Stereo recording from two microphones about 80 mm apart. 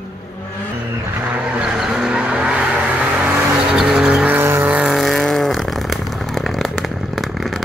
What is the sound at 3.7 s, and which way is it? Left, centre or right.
Vehicle, centre.